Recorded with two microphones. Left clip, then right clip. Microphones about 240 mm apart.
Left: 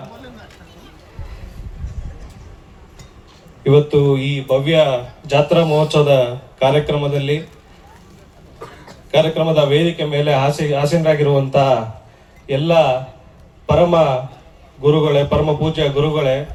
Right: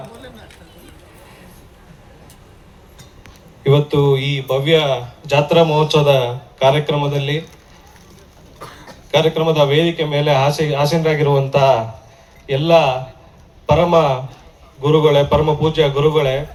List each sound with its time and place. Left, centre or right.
3.6 s a man's voice: right
9.1 s a man's voice: right